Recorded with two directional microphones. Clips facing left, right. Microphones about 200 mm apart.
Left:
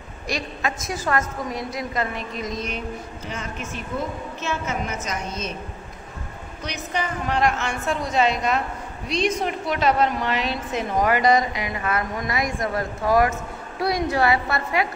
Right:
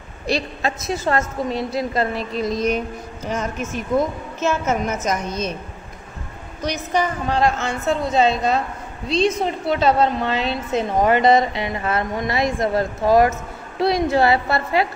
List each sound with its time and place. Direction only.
0.3 s a woman's voice: 30° right (ahead or behind)
4.4 s a woman's voice: 45° right (ahead or behind)
6.6 s a woman's voice: 40° right (ahead or behind)